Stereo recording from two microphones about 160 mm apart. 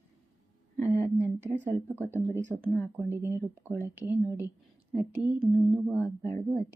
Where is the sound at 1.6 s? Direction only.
10° right (ahead or behind).